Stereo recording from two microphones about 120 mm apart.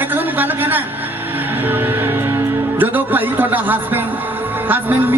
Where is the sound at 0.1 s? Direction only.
15° right (ahead or behind).